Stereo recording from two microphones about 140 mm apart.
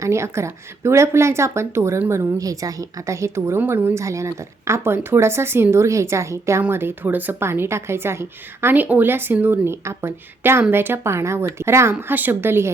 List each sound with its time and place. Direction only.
0.0 s a woman's voice: 20° right (ahead or behind)